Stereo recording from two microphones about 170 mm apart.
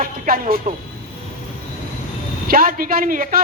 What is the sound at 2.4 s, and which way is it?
Speech, 60° right (ahead or behind).